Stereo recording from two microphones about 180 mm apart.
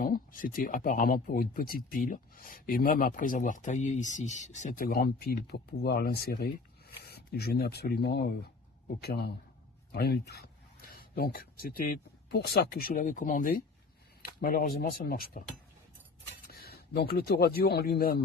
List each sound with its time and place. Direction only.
0.0 s speech: 50° left (ahead or behind)
16.5 s speech: 60° left (ahead or behind)